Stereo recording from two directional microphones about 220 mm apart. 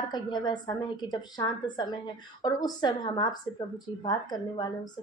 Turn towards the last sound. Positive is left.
turn(degrees=20)  # may be behind; listen again after turning